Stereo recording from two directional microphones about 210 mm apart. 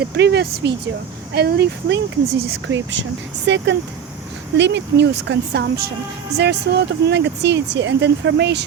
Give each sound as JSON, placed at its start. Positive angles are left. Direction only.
{"t": 0.0, "sound": "speech", "side_deg": -50}